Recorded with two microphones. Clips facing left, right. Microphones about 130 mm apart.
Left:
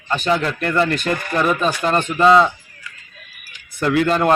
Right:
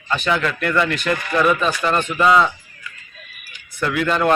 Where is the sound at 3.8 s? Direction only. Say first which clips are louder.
Left 3 dB; 40° left (ahead or behind).